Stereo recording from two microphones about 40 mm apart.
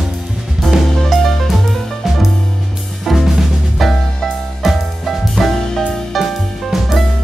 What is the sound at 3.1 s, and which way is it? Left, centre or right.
Drum kit, centre.